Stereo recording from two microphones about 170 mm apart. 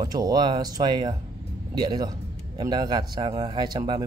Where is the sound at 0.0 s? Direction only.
25° right (ahead or behind).